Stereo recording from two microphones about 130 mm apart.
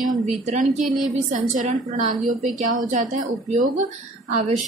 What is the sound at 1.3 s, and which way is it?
A woman's voice, 80° right.